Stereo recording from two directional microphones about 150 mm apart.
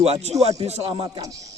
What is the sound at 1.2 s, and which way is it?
Speech, 20° right (ahead or behind).